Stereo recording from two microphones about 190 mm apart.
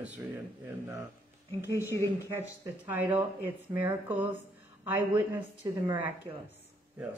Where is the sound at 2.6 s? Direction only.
10° right (ahead or behind).